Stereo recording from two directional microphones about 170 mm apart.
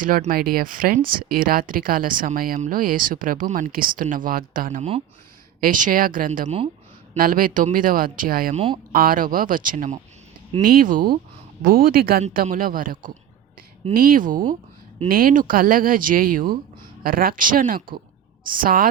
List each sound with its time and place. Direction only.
0.0 s speech: 55° right (ahead or behind)
4.8 s speech: 35° right (ahead or behind)
5.5 s speech: 55° right (ahead or behind)
8.5 s speech: 35° right (ahead or behind)
8.9 s speech: 60° right (ahead or behind)